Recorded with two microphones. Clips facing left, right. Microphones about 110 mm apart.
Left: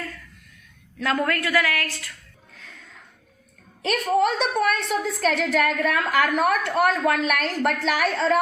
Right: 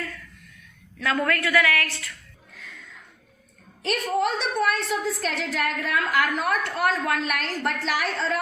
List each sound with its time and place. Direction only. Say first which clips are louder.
0.9 s a woman's voice: left 1 dB; 20° left (ahead or behind)
3.8 s a woman's voice: left 3 dB; 65° left (ahead or behind)